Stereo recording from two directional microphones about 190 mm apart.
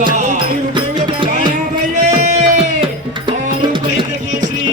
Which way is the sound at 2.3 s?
35° right (ahead or behind).